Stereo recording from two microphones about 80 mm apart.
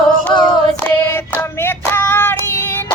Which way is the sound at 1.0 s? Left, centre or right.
Left.